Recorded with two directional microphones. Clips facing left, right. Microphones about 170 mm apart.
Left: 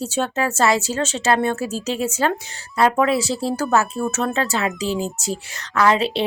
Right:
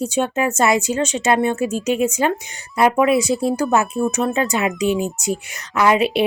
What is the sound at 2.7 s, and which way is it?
Speech, 15° right (ahead or behind).